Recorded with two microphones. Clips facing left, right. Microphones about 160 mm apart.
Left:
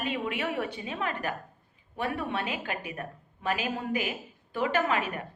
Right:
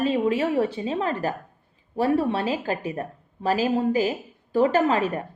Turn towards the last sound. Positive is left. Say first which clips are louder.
# right 7 dB
turn(degrees=-35)  # may be behind; listen again after turning